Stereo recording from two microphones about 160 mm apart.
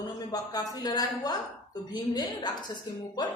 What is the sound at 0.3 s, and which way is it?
A woman's voice, 25° left (ahead or behind).